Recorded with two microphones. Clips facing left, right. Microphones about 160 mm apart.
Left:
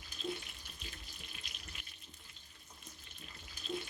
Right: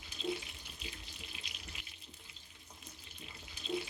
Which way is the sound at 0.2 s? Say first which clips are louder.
Right 3 dB; 90° right.